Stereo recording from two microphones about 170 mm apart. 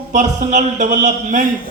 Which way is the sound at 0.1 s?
45° right (ahead or behind).